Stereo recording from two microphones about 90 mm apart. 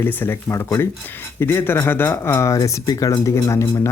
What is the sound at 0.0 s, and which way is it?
Speech, 20° left (ahead or behind).